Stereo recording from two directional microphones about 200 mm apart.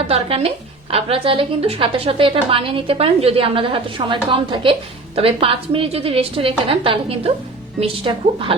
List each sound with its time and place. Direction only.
0.1 s a woman's voice: 30° right (ahead or behind)